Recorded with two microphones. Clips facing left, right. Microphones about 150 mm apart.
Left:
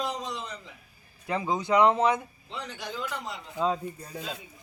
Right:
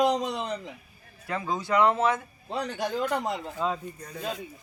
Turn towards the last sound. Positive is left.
turn(degrees=10)  # may be behind; listen again after turning